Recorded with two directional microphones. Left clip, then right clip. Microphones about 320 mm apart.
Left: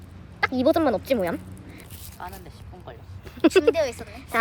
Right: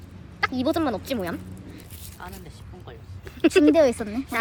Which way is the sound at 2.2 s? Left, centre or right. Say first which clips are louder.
Left 3 dB; left.